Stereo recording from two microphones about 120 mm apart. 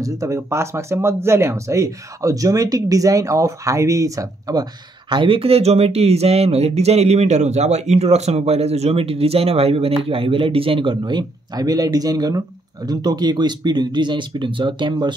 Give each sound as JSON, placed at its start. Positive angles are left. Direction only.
{"t": 0.0, "sound": "speech", "side_deg": -25}
{"t": 5.1, "sound": "speech", "side_deg": -45}